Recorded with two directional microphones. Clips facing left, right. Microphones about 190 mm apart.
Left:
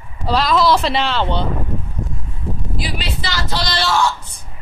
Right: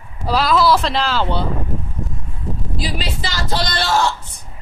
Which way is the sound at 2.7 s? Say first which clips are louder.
Right 3 dB; 40° right (ahead or behind).